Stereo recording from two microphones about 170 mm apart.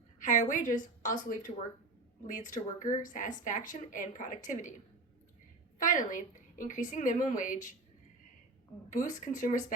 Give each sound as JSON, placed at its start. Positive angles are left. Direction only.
{"t": 0.2, "sound": "speech", "side_deg": 50}
{"t": 5.8, "sound": "speech", "side_deg": 50}
{"t": 8.9, "sound": "speech", "side_deg": 50}